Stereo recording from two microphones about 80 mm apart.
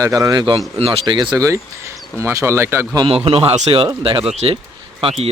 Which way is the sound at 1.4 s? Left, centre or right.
Right.